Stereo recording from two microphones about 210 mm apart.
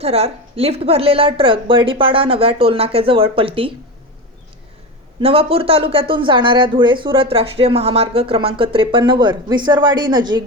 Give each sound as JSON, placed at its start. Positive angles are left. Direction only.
{"t": 0.0, "sound": "speech", "side_deg": -30}
{"t": 5.2, "sound": "speech", "side_deg": -25}